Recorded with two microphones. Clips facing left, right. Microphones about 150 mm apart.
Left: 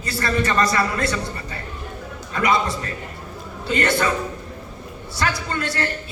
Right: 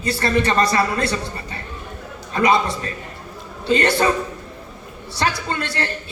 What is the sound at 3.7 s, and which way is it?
Speech, 30° right (ahead or behind).